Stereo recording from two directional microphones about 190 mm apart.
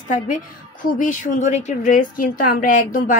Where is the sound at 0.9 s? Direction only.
45° left (ahead or behind).